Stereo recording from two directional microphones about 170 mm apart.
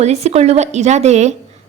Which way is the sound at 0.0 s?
40° right (ahead or behind).